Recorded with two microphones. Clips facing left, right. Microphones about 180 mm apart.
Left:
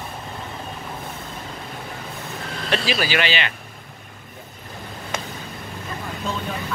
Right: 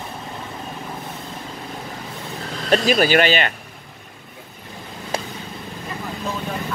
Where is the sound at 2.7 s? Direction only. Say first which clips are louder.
Right 7 dB; 45° right (ahead or behind).